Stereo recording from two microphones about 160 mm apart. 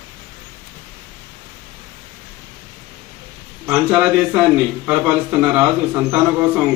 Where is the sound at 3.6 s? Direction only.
5° right (ahead or behind).